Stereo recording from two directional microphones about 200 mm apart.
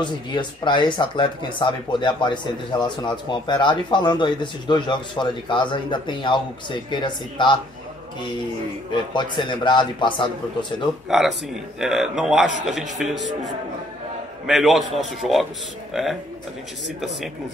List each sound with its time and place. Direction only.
0.0 s speech: 25° left (ahead or behind)
8.9 s speech: 25° left (ahead or behind)
11.1 s speech: centre (ahead or behind)
14.4 s speech: centre (ahead or behind)